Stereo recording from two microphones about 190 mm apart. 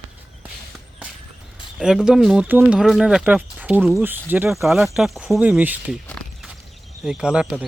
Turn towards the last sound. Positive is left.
turn(degrees=-5)  # may be behind; listen again after turning